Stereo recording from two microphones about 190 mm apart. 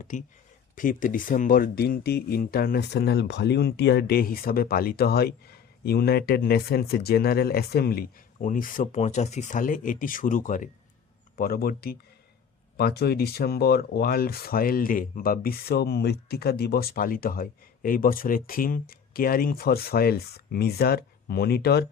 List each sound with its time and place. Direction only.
0.1 s speech: 40° left (ahead or behind); by 21.8 s 55° left (ahead or behind)